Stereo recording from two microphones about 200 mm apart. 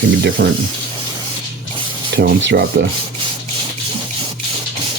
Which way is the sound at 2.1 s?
60° right (ahead or behind).